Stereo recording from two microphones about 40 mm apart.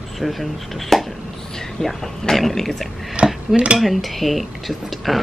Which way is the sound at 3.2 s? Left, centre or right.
Right.